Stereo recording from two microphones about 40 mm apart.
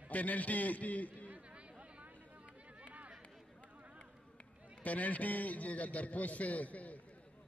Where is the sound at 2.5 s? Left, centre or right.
Right.